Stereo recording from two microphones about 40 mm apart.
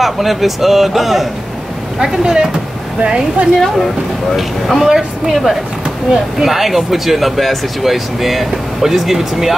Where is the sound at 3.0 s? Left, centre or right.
Right.